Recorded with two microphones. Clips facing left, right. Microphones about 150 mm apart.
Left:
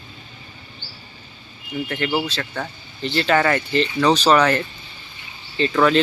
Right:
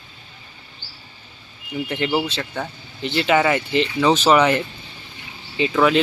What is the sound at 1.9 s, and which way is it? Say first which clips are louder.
Speech: right 2 dB; 20° right (ahead or behind).